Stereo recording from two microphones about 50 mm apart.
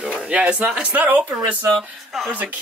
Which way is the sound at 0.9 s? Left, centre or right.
Right.